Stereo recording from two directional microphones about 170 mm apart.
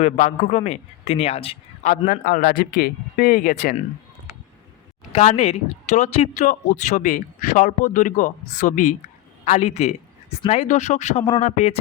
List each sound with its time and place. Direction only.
0.0 s a man's voice: 40° left (ahead or behind)
5.1 s a man's voice: 40° left (ahead or behind)